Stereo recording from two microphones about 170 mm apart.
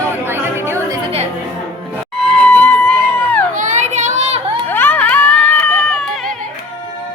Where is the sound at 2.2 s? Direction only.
5° left (ahead or behind).